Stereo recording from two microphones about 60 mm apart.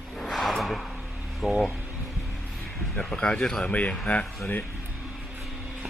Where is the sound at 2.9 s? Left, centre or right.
Centre.